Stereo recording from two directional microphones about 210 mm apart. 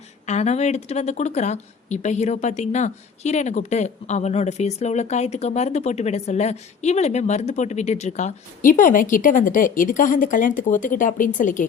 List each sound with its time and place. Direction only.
0.3 s speech: 30° left (ahead or behind)